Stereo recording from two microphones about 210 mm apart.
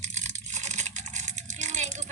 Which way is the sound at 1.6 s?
35° right (ahead or behind).